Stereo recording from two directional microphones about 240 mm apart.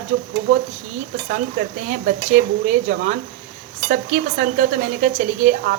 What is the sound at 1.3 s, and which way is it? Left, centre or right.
Speech, right.